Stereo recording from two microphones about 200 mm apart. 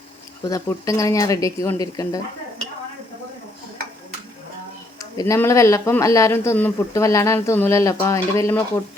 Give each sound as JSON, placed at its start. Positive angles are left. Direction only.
{"t": 0.4, "sound": "speech", "side_deg": 15}
{"t": 4.9, "sound": "speech", "side_deg": 15}